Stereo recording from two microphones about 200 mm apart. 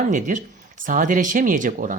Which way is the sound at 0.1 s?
40° right (ahead or behind).